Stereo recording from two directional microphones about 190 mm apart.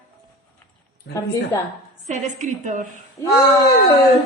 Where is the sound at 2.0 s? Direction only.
40° right (ahead or behind).